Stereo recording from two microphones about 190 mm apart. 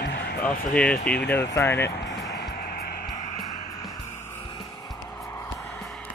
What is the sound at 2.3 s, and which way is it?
Music, 60° left (ahead or behind).